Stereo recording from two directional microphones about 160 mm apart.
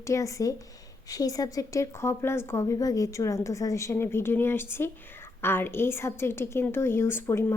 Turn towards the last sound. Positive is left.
turn(degrees=15)  # may be behind; listen again after turning